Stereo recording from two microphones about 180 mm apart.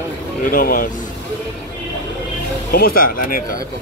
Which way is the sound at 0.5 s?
50° left (ahead or behind).